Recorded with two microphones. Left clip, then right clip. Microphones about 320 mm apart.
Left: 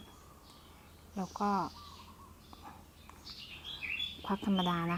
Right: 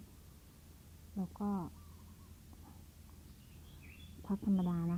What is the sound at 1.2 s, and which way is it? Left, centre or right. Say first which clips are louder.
Speech: left 9 dB; centre.